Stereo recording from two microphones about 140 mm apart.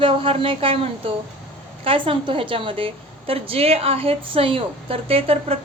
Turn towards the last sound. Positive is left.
turn(degrees=-45)  # may be behind; listen again after turning